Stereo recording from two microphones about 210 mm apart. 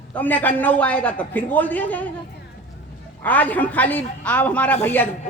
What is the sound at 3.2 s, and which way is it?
A man's voice, 10° left (ahead or behind).